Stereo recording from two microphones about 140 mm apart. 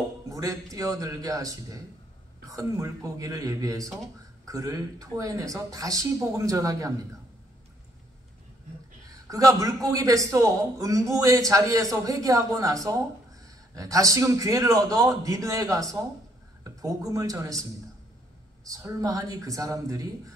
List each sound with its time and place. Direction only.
0.3 s a man's voice: 25° right (ahead or behind)
9.3 s a man's voice: 25° right (ahead or behind)
18.7 s a man's voice: 20° right (ahead or behind)